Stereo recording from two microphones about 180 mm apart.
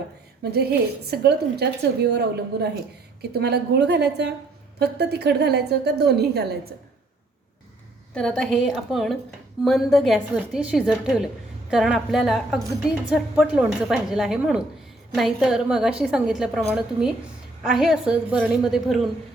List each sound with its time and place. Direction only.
0.4 s a woman's voice: 65° right (ahead or behind)
8.1 s a woman's voice: 5° left (ahead or behind)